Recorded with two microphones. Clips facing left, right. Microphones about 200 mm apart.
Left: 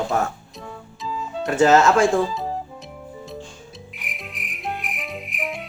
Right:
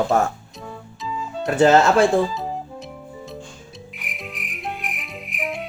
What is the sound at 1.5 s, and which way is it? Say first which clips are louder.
Speech: right 1 dB; 30° right (ahead or behind).